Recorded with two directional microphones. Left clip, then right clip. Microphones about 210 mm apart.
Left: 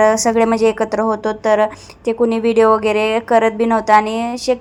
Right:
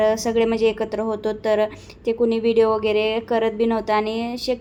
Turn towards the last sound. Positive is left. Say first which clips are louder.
# left 6 dB
turn(degrees=10)  # may be behind; listen again after turning